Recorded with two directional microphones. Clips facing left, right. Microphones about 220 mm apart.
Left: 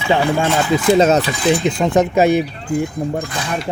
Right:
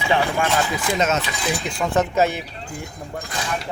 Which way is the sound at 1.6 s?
20° left (ahead or behind).